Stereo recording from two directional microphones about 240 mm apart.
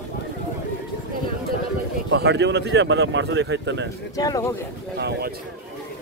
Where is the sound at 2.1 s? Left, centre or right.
Right.